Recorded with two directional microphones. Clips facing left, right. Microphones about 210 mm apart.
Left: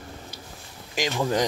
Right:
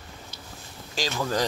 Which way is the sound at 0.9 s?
20° left (ahead or behind).